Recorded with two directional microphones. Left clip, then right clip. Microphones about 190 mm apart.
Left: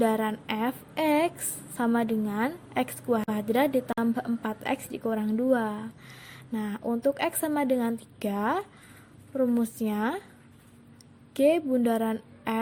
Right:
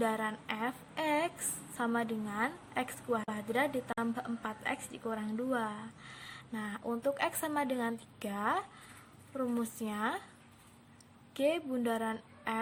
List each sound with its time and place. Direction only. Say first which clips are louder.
0.0 s a sound: left 8 dB; 25° left (ahead or behind)
1.7 s a woman's voice: left 7 dB; 25° left (ahead or behind)
11.3 s a woman's voice: left 9 dB; 25° left (ahead or behind)